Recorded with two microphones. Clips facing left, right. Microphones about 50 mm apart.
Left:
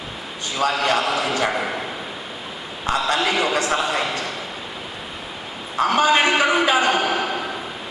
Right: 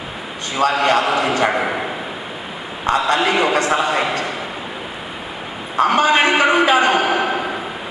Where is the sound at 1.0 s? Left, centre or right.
Centre.